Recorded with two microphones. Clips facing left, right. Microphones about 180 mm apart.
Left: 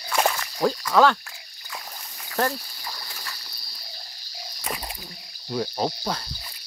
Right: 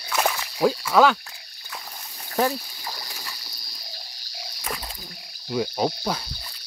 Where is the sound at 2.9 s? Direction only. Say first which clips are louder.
Right 1 dB; 15° right (ahead or behind).